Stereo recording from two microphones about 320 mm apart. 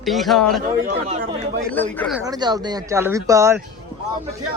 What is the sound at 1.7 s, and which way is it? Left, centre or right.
Speech, centre.